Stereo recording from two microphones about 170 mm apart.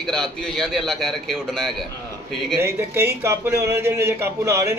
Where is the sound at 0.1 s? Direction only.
Centre (ahead or behind).